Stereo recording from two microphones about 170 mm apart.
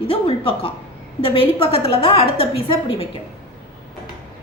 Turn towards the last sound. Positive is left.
turn(degrees=30)  # may be behind; listen again after turning